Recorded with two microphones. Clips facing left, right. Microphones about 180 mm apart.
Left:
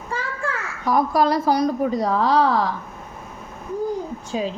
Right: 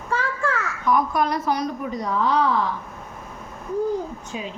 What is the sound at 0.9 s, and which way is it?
Speech, 35° left (ahead or behind).